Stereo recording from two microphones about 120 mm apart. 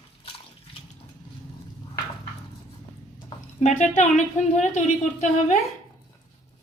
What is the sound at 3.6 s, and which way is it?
Speech, 85° left.